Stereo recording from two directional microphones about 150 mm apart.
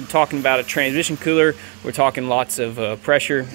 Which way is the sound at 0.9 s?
75° left (ahead or behind).